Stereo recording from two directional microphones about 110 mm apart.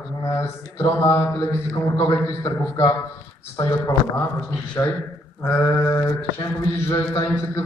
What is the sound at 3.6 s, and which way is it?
Mantra, 35° left (ahead or behind).